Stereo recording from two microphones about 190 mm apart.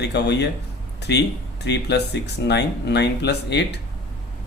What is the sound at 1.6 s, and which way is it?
Speech, 65° left (ahead or behind).